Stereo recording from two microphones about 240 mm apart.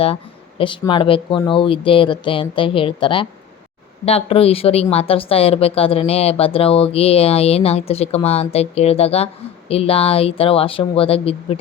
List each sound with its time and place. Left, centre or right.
0.6 s a woman's voice: left